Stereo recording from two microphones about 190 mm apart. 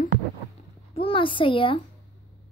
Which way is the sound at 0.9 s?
30° left (ahead or behind).